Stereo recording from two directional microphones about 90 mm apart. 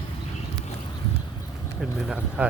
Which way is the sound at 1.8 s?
5° right (ahead or behind).